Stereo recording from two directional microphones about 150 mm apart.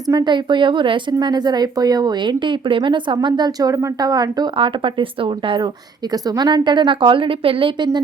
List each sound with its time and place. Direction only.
0.1 s a woman's voice: 25° right (ahead or behind)